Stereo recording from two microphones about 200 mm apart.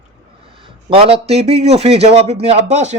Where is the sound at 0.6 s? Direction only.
25° right (ahead or behind).